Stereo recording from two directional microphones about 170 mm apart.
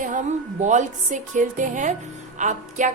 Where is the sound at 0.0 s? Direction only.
45° right (ahead or behind).